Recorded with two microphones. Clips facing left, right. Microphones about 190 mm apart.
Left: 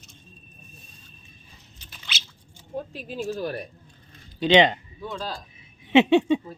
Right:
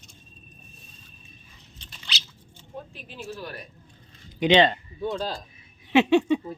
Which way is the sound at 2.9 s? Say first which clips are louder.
Left 8 dB; 40° left (ahead or behind).